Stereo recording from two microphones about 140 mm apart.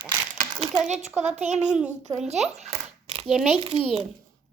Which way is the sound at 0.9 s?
55° right (ahead or behind).